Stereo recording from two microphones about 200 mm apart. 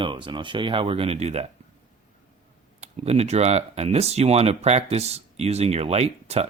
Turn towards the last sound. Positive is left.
turn(degrees=-30)  # may be behind; listen again after turning